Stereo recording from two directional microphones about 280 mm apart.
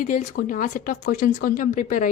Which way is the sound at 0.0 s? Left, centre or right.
Left.